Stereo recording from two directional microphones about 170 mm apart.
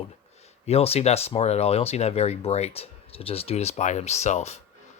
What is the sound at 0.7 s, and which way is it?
Speech, 35° left (ahead or behind).